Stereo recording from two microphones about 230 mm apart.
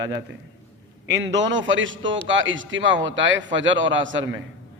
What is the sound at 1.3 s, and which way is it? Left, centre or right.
A man's voice, right.